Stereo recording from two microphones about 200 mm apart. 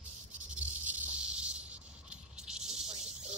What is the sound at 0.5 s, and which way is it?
Snake, 10° right (ahead or behind).